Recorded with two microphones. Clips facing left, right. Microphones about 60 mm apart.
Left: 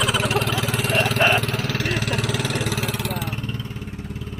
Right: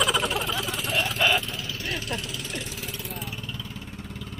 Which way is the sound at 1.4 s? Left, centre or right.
Left.